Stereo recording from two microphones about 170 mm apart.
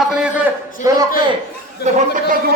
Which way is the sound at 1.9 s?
45° right (ahead or behind).